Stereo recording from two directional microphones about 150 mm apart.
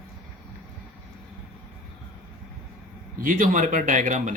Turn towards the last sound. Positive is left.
turn(degrees=-55)  # may be behind; listen again after turning